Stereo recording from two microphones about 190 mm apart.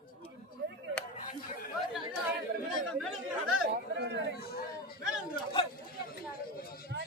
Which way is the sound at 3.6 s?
60° right (ahead or behind).